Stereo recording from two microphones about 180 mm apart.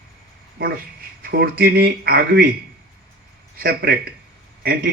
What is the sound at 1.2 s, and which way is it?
Speech, 55° right (ahead or behind).